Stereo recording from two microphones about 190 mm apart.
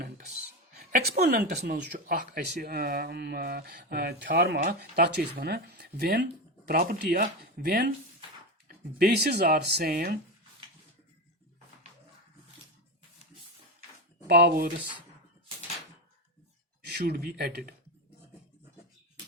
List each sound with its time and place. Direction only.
0.8 s speech: 45° right (ahead or behind)
14.3 s speech: 55° right (ahead or behind)
16.9 s speech: 55° right (ahead or behind)